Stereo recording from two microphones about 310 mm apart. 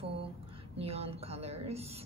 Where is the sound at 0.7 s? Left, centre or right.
Centre.